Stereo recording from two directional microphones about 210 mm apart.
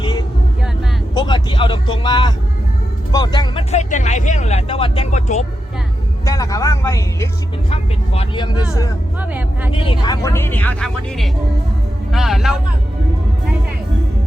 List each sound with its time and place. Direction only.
0.0 s a sound: 20° left (ahead or behind)
1.1 s speech: 20° left (ahead or behind)
6.2 s speech: 15° left (ahead or behind)
7.7 s speech: 30° left (ahead or behind)
9.8 s speech: 20° left (ahead or behind); by 12.5 s centre (ahead or behind)